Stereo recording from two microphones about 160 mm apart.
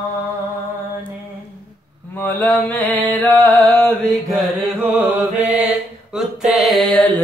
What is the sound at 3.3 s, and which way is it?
Music, 10° left (ahead or behind).